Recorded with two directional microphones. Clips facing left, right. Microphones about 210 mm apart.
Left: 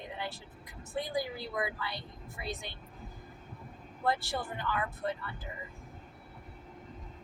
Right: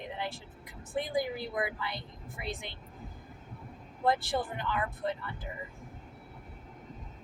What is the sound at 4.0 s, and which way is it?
Speech, 20° right (ahead or behind).